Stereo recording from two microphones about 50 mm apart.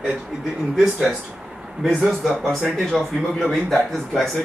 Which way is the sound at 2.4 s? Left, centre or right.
Centre.